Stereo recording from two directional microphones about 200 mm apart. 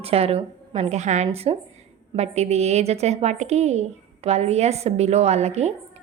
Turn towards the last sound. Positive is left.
turn(degrees=-35)  # may be behind; listen again after turning